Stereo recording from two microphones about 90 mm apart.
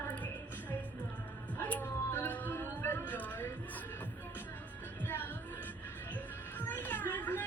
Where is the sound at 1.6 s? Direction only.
20° left (ahead or behind).